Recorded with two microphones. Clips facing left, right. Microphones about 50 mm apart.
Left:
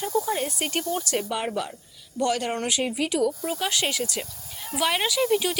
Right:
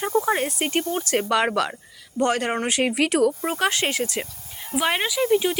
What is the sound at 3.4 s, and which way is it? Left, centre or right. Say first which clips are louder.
A woman's voice: right 4 dB; right.